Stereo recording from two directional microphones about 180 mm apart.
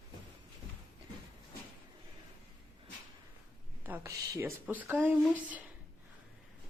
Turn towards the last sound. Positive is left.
turn(degrees=-10)  # may be behind; listen again after turning